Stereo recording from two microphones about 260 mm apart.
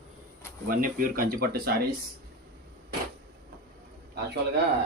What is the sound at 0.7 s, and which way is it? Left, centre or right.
Speech, right.